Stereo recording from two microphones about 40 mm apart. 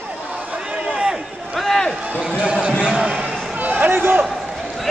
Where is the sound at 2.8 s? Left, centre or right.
Right.